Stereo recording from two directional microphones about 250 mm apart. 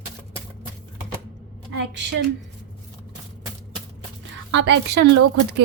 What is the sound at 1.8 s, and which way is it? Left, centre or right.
Speech, right.